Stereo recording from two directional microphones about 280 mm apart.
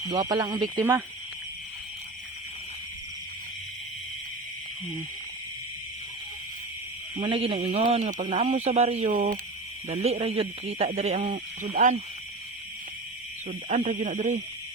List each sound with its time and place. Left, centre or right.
0.1 s speech: centre
7.2 s a man's voice: centre
13.5 s a man's voice: right